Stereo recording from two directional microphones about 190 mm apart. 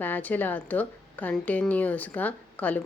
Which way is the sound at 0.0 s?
10° left (ahead or behind).